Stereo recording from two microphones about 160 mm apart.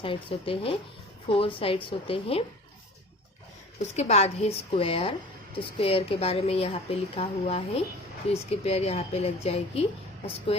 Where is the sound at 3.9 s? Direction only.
45° left (ahead or behind).